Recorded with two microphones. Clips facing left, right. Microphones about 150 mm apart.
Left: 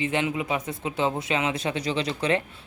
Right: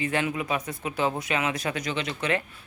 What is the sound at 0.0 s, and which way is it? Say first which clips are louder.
Speech: left 1 dB; 20° left (ahead or behind).